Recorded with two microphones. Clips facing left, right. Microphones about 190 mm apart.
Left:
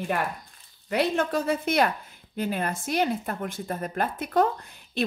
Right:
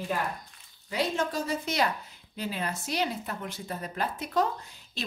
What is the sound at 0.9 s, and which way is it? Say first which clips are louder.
A woman's voice: left 5 dB; 60° left (ahead or behind).